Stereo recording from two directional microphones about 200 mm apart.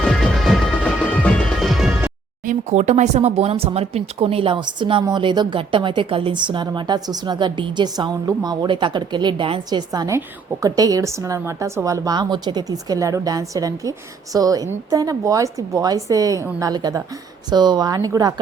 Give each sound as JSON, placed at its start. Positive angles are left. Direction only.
{"t": 0.0, "sound": "music", "side_deg": 0}
{"t": 2.4, "sound": "a woman's voice", "side_deg": -35}